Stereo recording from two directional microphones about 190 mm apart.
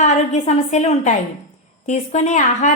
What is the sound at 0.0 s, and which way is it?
A woman's voice, 35° left (ahead or behind).